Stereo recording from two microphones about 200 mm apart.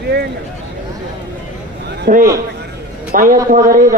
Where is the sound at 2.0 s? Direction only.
45° right (ahead or behind).